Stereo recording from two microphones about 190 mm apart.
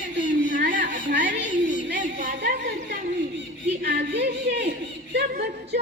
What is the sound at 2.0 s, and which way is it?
A woman's voice, 50° right (ahead or behind).